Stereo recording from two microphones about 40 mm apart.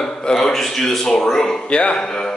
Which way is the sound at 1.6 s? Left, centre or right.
Left.